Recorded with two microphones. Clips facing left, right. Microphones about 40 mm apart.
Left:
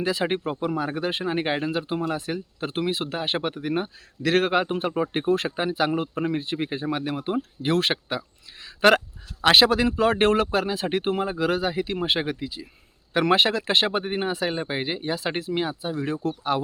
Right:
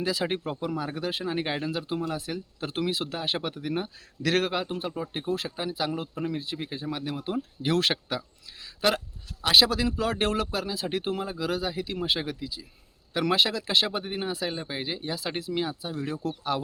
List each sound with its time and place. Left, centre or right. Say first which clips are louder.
0.0 s speech: left 4 dB; left
0.7 s speech: left 4 dB; left
8.8 s speech: left 8 dB; left